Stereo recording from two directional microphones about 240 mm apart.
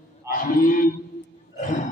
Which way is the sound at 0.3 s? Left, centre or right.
Left.